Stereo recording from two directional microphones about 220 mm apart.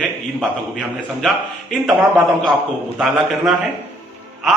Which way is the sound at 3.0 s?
Centre (ahead or behind).